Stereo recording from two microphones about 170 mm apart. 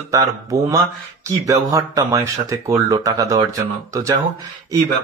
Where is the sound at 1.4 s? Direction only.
20° right (ahead or behind).